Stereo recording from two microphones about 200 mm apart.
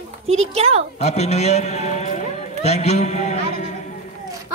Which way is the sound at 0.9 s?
35° left (ahead or behind).